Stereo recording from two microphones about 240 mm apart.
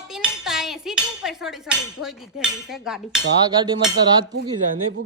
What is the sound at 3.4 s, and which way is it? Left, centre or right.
Speech, centre.